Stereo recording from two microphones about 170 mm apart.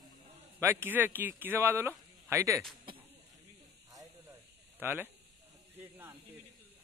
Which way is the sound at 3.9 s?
20° right (ahead or behind).